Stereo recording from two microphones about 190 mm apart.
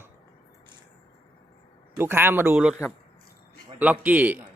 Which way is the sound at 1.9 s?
10° right (ahead or behind).